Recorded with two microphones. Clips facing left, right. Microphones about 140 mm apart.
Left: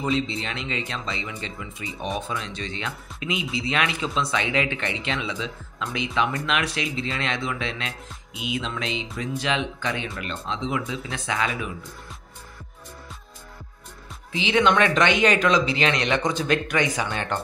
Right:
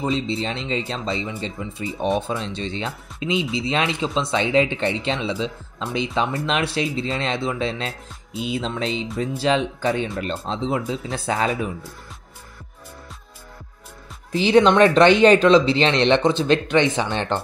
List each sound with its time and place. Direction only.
0.0 s speech: 30° right (ahead or behind)
14.3 s speech: 35° right (ahead or behind)